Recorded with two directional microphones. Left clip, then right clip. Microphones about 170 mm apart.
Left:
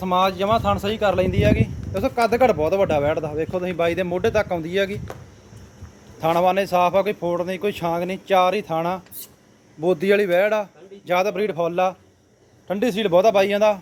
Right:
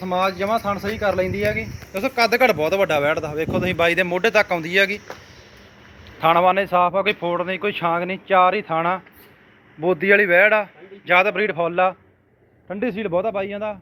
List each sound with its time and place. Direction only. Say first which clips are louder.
0.0 s a man's voice: left 2 dB; 30° left (ahead or behind)
1.9 s speech: right 1 dB; 15° left (ahead or behind)
6.1 s a man's voice: right 3 dB; 20° left (ahead or behind)
12.6 s a man's voice: left 3 dB; 30° left (ahead or behind)